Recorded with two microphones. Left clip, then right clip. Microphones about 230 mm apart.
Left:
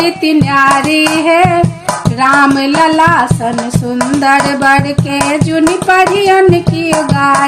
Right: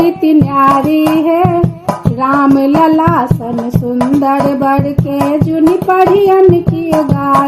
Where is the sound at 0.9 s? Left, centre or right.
Centre.